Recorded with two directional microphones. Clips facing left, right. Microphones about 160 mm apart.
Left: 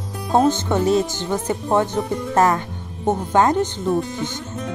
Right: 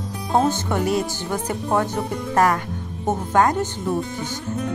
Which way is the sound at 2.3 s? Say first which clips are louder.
Left 1 dB; 25° left (ahead or behind).